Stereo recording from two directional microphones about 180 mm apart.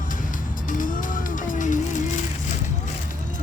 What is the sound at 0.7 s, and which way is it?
Music, 45° left (ahead or behind).